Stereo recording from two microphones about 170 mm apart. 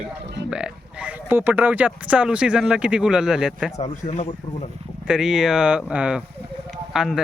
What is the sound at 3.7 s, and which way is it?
Speech, 40° left (ahead or behind).